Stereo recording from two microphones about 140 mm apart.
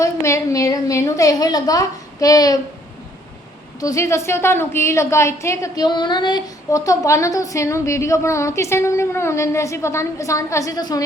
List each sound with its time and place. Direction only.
0.0 s a woman's voice: 20° left (ahead or behind)
3.8 s a woman's voice: 25° left (ahead or behind)